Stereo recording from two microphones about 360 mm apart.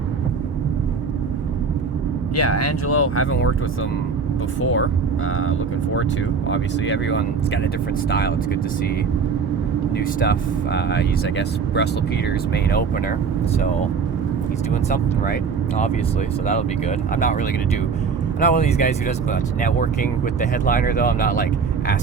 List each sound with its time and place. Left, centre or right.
2.3 s speech: left
4.6 s speech: left
10.0 s speech: left
14.8 s speech: left
18.3 s speech: centre